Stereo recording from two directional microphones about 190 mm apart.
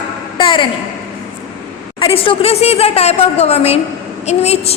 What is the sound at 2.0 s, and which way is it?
A woman's voice, 30° left (ahead or behind).